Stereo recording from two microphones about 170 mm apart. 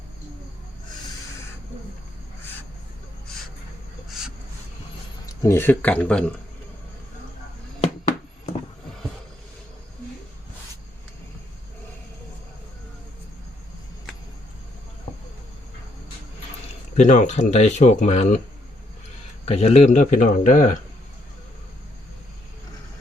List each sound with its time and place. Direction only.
5.2 s speech: 15° left (ahead or behind)
15.1 s insect: 40° left (ahead or behind)
17.0 s speech: 45° left (ahead or behind)
19.5 s speech: 35° left (ahead or behind)